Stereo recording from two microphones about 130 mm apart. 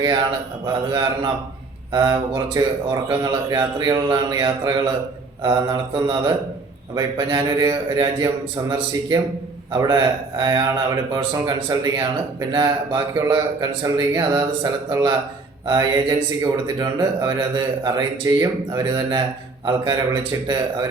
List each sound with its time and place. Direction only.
0.0 s speech: 30° right (ahead or behind)
9.7 s speech: 30° right (ahead or behind)